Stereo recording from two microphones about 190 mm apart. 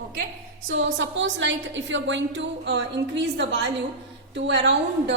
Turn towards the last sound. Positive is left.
turn(degrees=-70)  # may be behind; listen again after turning